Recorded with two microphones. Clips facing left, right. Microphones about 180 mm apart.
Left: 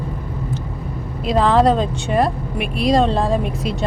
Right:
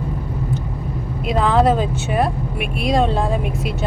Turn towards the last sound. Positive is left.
turn(degrees=0)  # may be behind; listen again after turning